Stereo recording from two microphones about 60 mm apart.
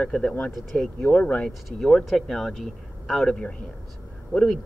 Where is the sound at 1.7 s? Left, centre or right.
Centre.